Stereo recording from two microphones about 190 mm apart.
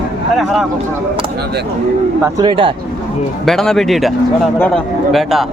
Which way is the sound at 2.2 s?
20° right (ahead or behind).